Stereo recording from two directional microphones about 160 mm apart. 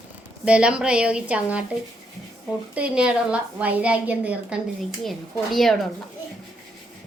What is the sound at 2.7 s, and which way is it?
A woman's voice, 5° right (ahead or behind).